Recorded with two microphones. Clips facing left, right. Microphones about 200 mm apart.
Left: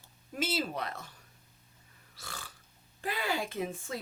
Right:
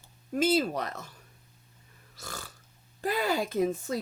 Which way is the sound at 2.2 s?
45° right (ahead or behind).